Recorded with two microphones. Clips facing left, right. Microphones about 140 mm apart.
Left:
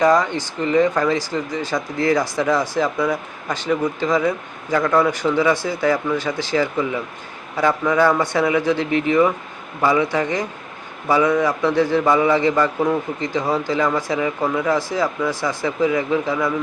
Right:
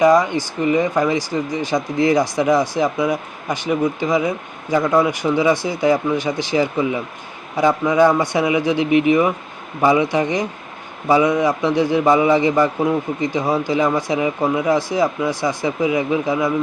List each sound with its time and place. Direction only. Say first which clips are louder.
0.0 s speech: right 3 dB; 10° right (ahead or behind)